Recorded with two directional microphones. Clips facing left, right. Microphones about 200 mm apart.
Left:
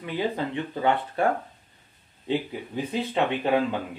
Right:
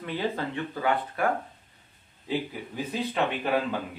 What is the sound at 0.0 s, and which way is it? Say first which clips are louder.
Speech: left 2 dB; 15° left (ahead or behind).